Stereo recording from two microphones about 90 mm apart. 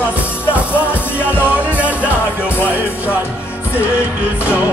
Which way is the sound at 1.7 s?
15° right (ahead or behind).